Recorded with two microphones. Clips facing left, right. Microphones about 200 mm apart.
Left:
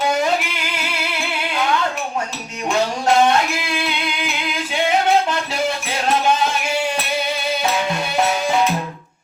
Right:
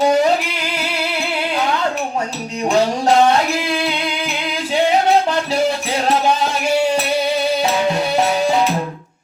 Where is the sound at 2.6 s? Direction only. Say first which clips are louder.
Right 3 dB; 35° right (ahead or behind).